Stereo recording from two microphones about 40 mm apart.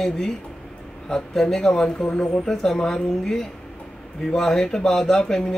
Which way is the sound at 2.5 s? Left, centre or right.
Centre.